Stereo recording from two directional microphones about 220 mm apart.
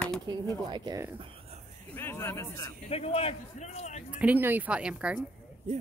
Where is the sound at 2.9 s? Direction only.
25° left (ahead or behind).